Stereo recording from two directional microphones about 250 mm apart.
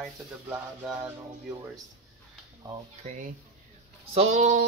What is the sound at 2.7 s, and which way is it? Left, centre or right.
Speech, right.